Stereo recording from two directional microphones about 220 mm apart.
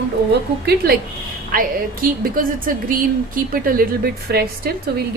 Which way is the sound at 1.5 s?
40° right (ahead or behind).